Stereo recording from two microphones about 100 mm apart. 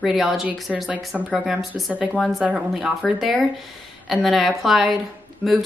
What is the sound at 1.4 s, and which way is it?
Speech, centre (ahead or behind).